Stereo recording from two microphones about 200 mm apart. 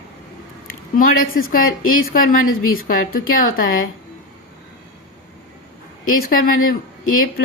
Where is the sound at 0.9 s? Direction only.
45° left (ahead or behind).